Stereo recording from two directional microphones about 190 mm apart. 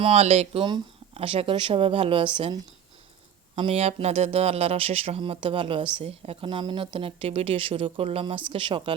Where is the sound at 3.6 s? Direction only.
30° right (ahead or behind).